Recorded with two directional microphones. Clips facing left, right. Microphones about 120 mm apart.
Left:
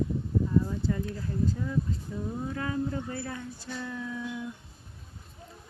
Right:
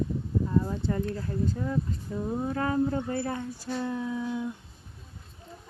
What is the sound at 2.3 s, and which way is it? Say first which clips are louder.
Speech: right 5 dB; 45° right (ahead or behind).